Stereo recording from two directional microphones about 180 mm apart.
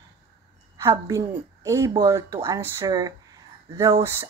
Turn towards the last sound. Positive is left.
turn(degrees=-15)  # may be behind; listen again after turning